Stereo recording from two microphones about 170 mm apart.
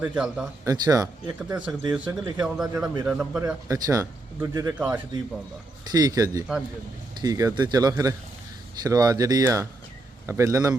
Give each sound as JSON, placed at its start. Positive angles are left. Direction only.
{"t": 0.0, "sound": "a man's voice", "side_deg": -5}
{"t": 0.6, "sound": "speech", "side_deg": -20}
{"t": 1.5, "sound": "a man's voice", "side_deg": -5}
{"t": 3.4, "sound": "a man's voice", "side_deg": -20}